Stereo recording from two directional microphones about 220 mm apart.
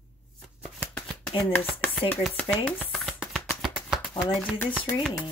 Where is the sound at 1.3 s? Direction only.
10° left (ahead or behind).